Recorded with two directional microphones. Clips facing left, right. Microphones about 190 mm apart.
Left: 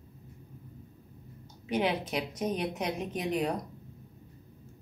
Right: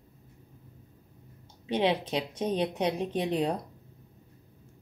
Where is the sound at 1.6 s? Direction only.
30° right (ahead or behind).